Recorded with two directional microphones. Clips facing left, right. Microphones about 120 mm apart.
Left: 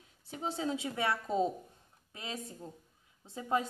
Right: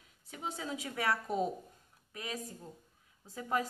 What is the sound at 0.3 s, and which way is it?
A woman's voice, 30° left (ahead or behind).